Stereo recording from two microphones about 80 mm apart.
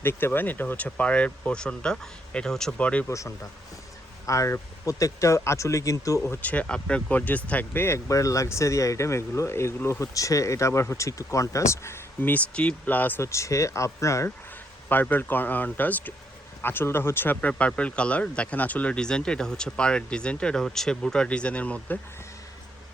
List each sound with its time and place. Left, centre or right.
0.0 s speech: left
3.1 s speech: left
6.2 s speech: left
6.5 s speech: centre; by 12.3 s left
12.3 s speech: centre
13.2 s speech: left
14.8 s speech: left
17.5 s speech: centre